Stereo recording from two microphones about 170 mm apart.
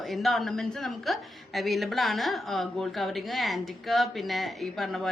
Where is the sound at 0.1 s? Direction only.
Centre (ahead or behind).